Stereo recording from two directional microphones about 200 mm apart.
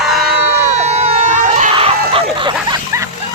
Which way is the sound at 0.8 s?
35° right (ahead or behind).